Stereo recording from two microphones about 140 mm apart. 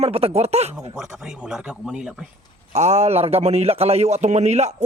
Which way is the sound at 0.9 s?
5° right (ahead or behind).